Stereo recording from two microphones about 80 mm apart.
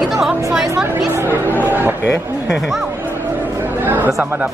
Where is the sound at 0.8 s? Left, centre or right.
Right.